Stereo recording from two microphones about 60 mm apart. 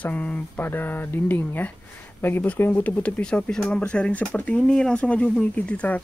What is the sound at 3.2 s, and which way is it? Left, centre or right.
Speech, centre.